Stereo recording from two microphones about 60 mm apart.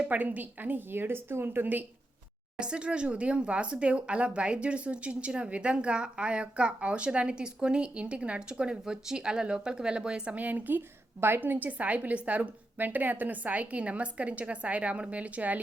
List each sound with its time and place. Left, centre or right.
0.0 s a woman's voice: right
2.6 s speech: centre
10.3 s a woman's voice: right